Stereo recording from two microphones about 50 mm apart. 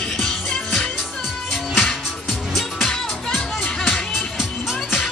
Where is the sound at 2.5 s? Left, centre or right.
Centre.